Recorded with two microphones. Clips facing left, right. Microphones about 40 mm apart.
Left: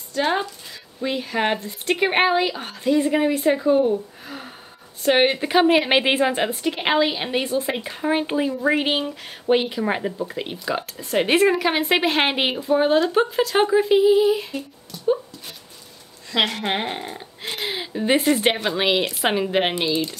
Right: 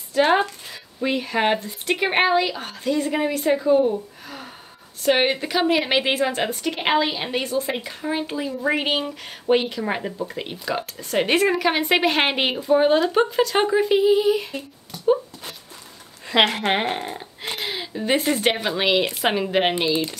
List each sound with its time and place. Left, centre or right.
0.2 s a woman's voice: centre
5.0 s a woman's voice: centre
5.5 s a woman's voice: left; by 7.4 s centre
7.8 s speech: left
8.5 s speech: centre
16.3 s speech: right; by 19.7 s centre
19.9 s speech: centre